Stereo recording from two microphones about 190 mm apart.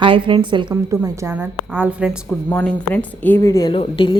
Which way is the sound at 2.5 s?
10° left (ahead or behind).